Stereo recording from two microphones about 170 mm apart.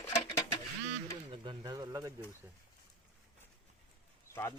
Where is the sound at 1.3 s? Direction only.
25° right (ahead or behind).